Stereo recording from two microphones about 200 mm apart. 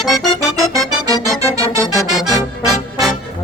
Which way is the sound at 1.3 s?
15° right (ahead or behind).